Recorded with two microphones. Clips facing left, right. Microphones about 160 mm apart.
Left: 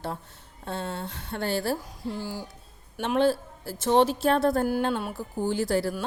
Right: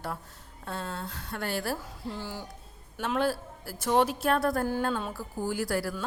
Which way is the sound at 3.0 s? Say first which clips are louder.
Left 5 dB; 25° left (ahead or behind).